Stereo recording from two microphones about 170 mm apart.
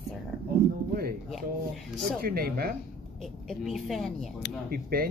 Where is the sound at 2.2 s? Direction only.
60° right (ahead or behind).